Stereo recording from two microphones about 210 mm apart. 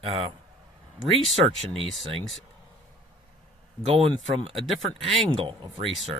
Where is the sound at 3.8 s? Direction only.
30° right (ahead or behind).